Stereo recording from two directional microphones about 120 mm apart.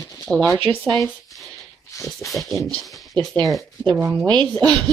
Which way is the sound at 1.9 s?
25° left (ahead or behind).